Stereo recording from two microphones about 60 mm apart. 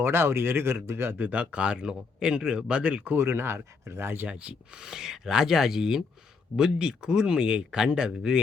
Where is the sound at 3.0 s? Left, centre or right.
Right.